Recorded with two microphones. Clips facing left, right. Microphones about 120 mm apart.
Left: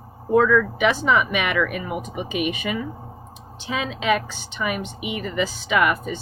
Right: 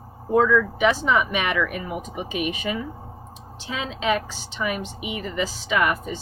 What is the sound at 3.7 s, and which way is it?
Speech, 70° left (ahead or behind).